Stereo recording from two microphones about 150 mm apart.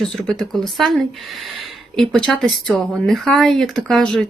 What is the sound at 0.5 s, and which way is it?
A woman's voice, centre (ahead or behind).